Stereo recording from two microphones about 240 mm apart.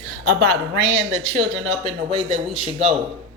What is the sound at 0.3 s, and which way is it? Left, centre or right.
A woman's voice, right.